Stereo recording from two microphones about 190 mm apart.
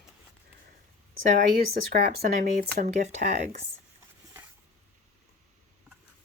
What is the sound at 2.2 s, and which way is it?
Speech, 40° right (ahead or behind).